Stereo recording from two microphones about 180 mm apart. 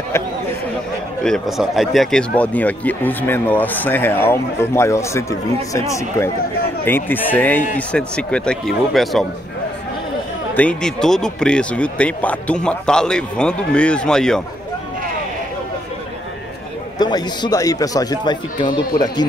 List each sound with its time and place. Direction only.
1.2 s speech: centre (ahead or behind)
10.5 s speech: 5° left (ahead or behind)
17.0 s speech: 25° left (ahead or behind)